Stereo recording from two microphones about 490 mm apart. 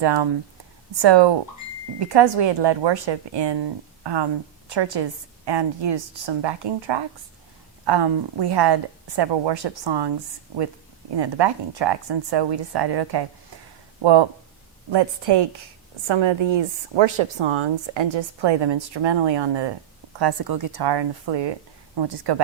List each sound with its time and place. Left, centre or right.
0.0 s a woman's voice: right
11.2 s a woman's voice: right